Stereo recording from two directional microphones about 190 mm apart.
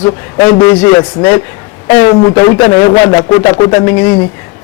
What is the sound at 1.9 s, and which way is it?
A man's voice, 15° left (ahead or behind).